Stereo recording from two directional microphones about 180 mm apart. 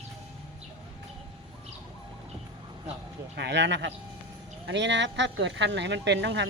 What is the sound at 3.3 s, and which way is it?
Speech, 70° right (ahead or behind).